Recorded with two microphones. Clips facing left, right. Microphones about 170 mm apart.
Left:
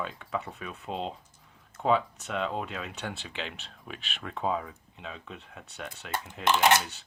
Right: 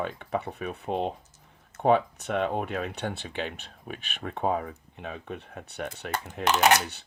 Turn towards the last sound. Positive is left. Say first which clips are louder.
# right 1 dB
turn(degrees=-70)  # may be behind; listen again after turning